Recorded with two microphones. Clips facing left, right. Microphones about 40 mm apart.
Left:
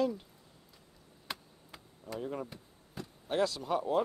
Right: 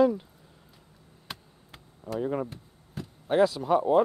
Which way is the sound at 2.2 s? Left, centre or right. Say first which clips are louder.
Right 9 dB; right.